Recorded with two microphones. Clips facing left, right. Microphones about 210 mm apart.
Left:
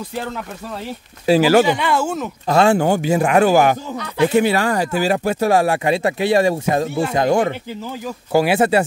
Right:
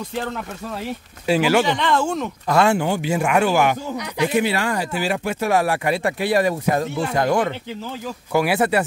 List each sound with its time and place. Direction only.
1.2 s speech: 35° left (ahead or behind)
1.7 s speech: 10° left (ahead or behind)
2.4 s speech: 30° left (ahead or behind)
2.8 s speech: 45° left (ahead or behind); by 8.8 s 25° left (ahead or behind)